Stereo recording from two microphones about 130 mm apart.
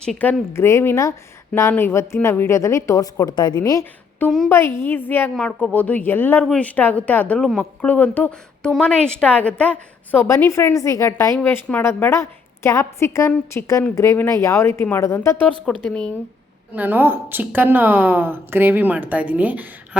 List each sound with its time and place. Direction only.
0.0 s a woman's voice: 10° left (ahead or behind); by 11.3 s 25° left (ahead or behind)
11.3 s a woman's voice: 15° left (ahead or behind)
15.6 s a woman's voice: 5° left (ahead or behind)
16.7 s a woman's voice: 15° right (ahead or behind)